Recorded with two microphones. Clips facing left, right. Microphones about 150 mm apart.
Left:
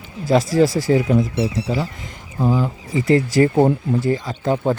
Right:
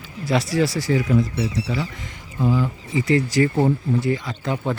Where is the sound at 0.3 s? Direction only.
45° left (ahead or behind).